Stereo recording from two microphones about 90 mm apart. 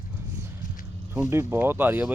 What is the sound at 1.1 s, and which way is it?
Speech, 25° right (ahead or behind).